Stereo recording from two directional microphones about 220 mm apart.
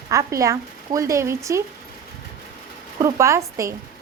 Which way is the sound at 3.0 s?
15° right (ahead or behind).